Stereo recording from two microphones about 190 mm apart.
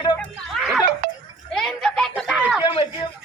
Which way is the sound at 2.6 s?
25° left (ahead or behind).